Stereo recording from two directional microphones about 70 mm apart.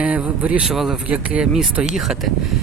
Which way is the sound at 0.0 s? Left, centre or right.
Centre.